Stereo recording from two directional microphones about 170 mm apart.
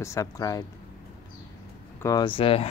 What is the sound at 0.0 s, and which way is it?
Speech, 20° left (ahead or behind).